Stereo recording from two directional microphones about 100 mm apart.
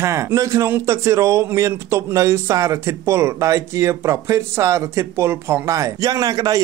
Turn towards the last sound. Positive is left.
turn(degrees=-40)  # may be behind; listen again after turning